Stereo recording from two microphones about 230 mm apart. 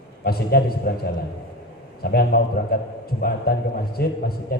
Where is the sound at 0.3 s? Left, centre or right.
Left.